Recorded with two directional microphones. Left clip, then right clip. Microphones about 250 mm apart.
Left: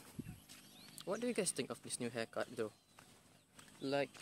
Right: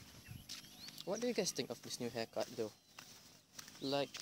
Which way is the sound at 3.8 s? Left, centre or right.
Centre.